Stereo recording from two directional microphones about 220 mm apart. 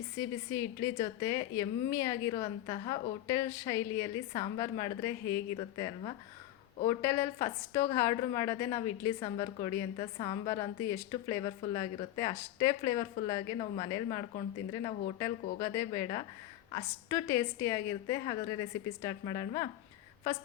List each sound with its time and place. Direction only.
0.2 s a woman's voice: 15° left (ahead or behind)
7.0 s speech: 10° left (ahead or behind)
9.2 s a woman's voice: 25° left (ahead or behind)